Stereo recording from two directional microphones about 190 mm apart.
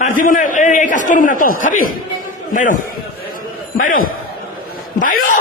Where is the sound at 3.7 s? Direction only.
45° left (ahead or behind).